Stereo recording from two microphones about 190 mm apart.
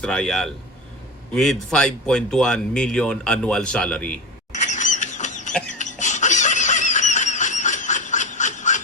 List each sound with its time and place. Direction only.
0.0 s speech: 5° left (ahead or behind)
1.7 s speech: 5° left (ahead or behind)
4.7 s a sound: 40° left (ahead or behind)